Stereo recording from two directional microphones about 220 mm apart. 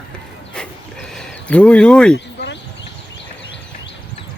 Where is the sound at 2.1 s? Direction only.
50° left (ahead or behind).